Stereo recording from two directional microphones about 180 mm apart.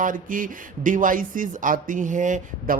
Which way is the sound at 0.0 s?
50° right (ahead or behind).